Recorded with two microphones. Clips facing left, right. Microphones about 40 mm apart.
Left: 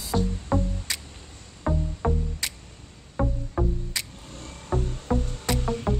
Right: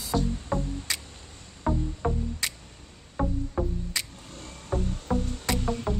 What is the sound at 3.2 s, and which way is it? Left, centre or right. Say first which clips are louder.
Music: left 1 dB; centre.